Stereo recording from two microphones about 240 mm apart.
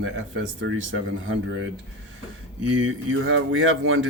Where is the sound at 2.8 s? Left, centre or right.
Right.